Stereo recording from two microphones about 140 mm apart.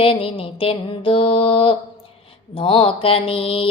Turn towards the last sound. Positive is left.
turn(degrees=40)  # may be behind; listen again after turning